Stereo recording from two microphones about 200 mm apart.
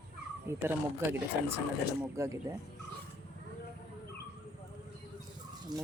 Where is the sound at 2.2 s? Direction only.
15° right (ahead or behind).